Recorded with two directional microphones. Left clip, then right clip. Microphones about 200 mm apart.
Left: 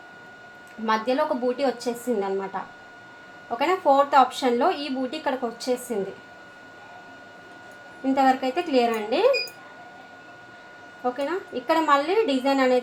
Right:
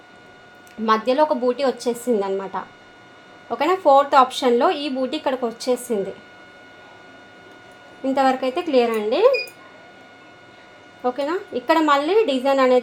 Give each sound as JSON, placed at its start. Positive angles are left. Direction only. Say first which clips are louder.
{"t": 0.9, "sound": "a woman's voice", "louder": "right 5 dB", "side_deg": -40}
{"t": 3.6, "sound": "a woman's voice", "louder": "right 4 dB", "side_deg": -40}
{"t": 8.1, "sound": "a woman's voice", "louder": "right 2 dB", "side_deg": -40}
{"t": 11.0, "sound": "a woman's voice", "louder": "right 4 dB", "side_deg": -45}